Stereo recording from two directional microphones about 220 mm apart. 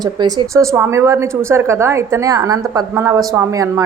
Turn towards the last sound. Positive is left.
turn(degrees=-15)  # may be behind; listen again after turning